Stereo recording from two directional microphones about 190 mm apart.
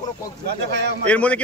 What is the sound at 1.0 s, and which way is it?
Speech, 5° left (ahead or behind).